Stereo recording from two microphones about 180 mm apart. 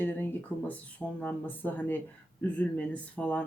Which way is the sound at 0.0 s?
10° left (ahead or behind).